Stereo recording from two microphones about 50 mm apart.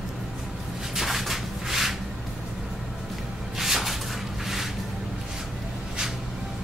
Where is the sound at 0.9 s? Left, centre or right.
Centre.